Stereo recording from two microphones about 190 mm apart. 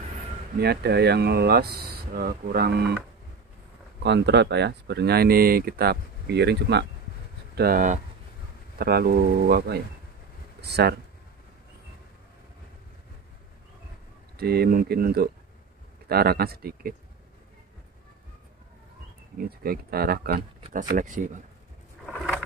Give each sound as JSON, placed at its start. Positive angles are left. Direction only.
{"t": 0.6, "sound": "speech", "side_deg": -60}
{"t": 4.0, "sound": "speech", "side_deg": -65}
{"t": 7.5, "sound": "speech", "side_deg": -50}
{"t": 14.3, "sound": "speech", "side_deg": -55}
{"t": 19.3, "sound": "speech", "side_deg": -55}
{"t": 22.0, "sound": "a sound", "side_deg": 0}